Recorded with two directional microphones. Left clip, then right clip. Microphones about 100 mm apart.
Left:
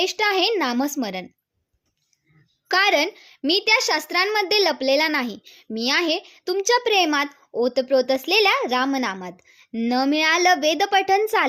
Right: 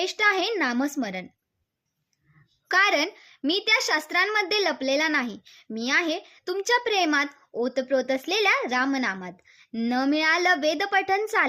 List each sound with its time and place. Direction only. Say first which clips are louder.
0.0 s a child's voice: left 3 dB; 35° left (ahead or behind)
2.6 s a child's voice: left 3 dB; 35° left (ahead or behind)